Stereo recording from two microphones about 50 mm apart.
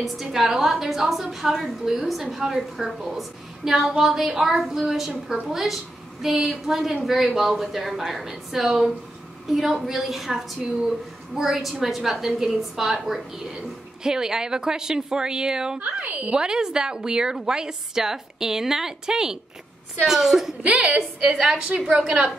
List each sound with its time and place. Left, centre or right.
0.0 s a woman's voice: centre
15.8 s a woman's voice: right
16.3 s a woman's voice: centre
20.6 s a woman's voice: right